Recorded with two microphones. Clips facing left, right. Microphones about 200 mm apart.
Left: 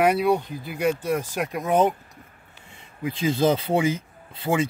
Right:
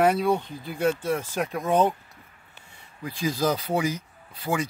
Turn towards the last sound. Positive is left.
turn(degrees=25)  # may be behind; listen again after turning